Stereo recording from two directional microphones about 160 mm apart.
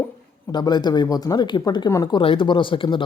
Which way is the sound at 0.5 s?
25° left (ahead or behind).